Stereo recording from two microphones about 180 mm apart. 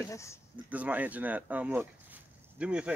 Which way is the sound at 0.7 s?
10° right (ahead or behind).